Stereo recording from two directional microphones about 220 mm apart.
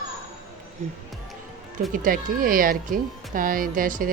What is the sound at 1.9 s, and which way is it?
Speech, 40° right (ahead or behind).